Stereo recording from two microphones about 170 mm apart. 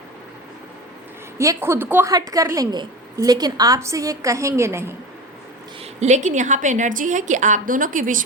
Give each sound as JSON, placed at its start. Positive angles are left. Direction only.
{"t": 1.4, "sound": "a woman's voice", "side_deg": -15}
{"t": 5.8, "sound": "a woman's voice", "side_deg": -40}